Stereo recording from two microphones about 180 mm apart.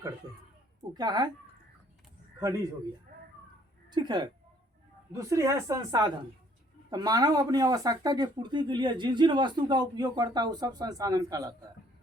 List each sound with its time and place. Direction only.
0.9 s speech: 25° right (ahead or behind)
3.8 s a woman's voice: 25° right (ahead or behind)